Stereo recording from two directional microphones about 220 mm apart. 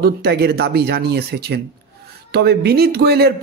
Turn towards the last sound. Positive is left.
turn(degrees=-45)  # may be behind; listen again after turning